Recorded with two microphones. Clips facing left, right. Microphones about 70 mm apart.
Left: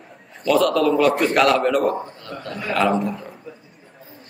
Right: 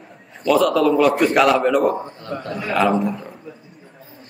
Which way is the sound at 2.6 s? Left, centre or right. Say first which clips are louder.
Right 1 dB; centre.